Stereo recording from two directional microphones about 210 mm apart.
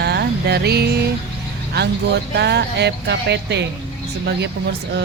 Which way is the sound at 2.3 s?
50° right (ahead or behind).